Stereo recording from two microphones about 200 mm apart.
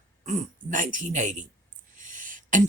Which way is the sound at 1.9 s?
40° right (ahead or behind).